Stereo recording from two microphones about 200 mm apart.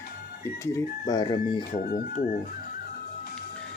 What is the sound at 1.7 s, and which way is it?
Speech, 45° left (ahead or behind).